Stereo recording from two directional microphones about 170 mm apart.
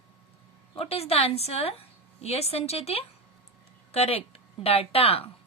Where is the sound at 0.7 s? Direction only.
35° left (ahead or behind).